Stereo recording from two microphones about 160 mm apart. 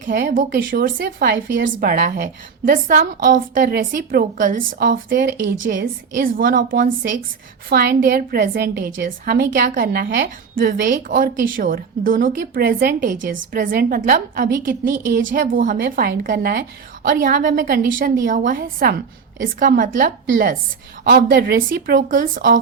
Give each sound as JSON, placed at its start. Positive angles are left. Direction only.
{"t": 0.0, "sound": "a woman's voice", "side_deg": -55}
{"t": 5.7, "sound": "speech", "side_deg": -75}
{"t": 6.2, "sound": "a woman's voice", "side_deg": -60}
{"t": 7.7, "sound": "a woman's voice", "side_deg": -75}
{"t": 19.4, "sound": "a woman's voice", "side_deg": -60}
{"t": 21.0, "sound": "speech", "side_deg": -75}